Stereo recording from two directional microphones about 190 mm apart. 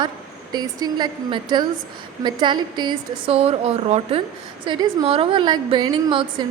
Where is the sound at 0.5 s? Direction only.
20° right (ahead or behind).